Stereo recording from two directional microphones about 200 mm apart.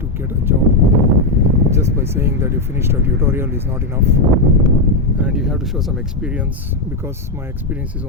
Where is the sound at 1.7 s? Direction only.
10° right (ahead or behind).